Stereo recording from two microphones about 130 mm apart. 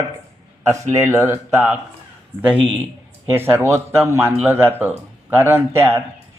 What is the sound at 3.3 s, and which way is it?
Speech, 15° right (ahead or behind).